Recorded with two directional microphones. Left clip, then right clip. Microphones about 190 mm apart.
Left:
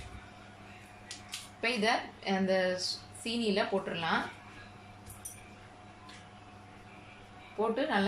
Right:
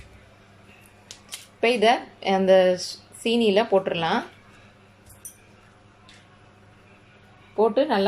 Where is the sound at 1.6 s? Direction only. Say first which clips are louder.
Right 11 dB; 45° right (ahead or behind).